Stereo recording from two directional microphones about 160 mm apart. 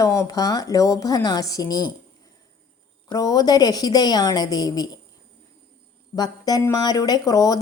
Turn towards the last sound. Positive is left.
turn(degrees=20)  # may be behind; listen again after turning